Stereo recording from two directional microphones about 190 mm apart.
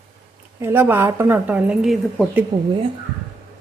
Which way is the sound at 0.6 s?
10° right (ahead or behind).